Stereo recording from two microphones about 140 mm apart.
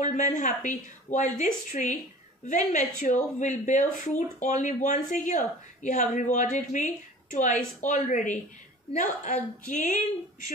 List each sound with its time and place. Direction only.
0.0 s speech: 60° left (ahead or behind)